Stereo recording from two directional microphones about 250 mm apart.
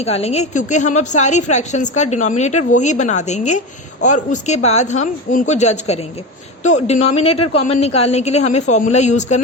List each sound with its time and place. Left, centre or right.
0.0 s a woman's voice: left